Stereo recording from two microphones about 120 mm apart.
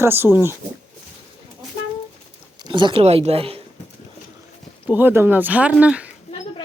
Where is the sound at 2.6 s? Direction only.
40° right (ahead or behind).